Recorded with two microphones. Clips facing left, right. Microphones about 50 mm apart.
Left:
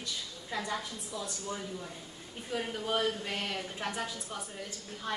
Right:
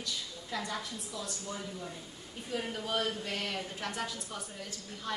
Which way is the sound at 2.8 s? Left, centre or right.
Centre.